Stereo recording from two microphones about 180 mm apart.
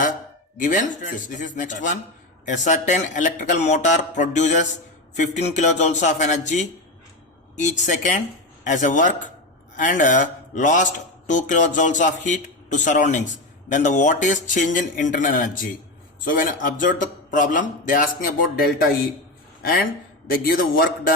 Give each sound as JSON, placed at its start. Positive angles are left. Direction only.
{"t": 0.5, "sound": "a man's voice", "side_deg": 45}
{"t": 5.1, "sound": "a sound", "side_deg": 40}
{"t": 7.5, "sound": "a man's voice", "side_deg": 40}
{"t": 20.2, "sound": "a man's voice", "side_deg": 55}